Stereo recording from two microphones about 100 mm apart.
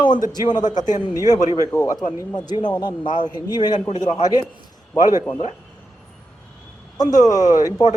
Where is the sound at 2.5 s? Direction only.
45° left (ahead or behind).